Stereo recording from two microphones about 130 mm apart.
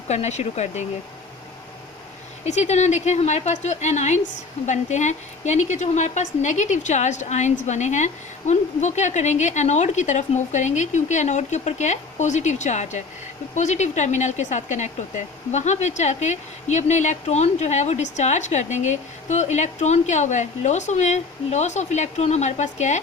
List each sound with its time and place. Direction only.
0.1 s speech: 60° left (ahead or behind)
2.4 s speech: 60° left (ahead or behind)